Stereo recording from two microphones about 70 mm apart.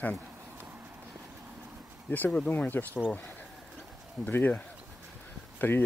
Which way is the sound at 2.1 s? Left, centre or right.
Left.